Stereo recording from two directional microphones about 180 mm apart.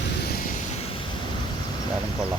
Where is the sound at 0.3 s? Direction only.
45° left (ahead or behind).